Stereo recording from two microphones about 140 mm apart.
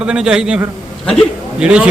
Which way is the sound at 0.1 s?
5° right (ahead or behind).